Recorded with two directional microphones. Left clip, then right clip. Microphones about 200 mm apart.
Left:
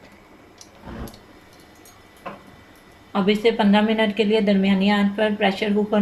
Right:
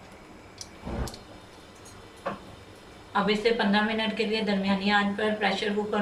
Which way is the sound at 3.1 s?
40° left (ahead or behind).